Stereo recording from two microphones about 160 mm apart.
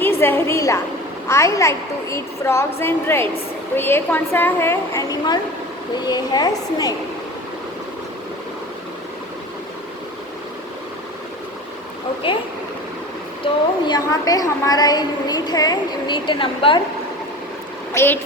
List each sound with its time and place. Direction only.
0.0 s a woman's voice: 15° left (ahead or behind)
12.2 s speech: 35° left (ahead or behind)
13.4 s a woman's voice: 25° left (ahead or behind)
17.9 s a child's voice: 15° left (ahead or behind)